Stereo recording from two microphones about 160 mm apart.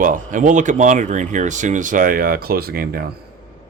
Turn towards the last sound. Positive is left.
turn(degrees=-70)  # may be behind; listen again after turning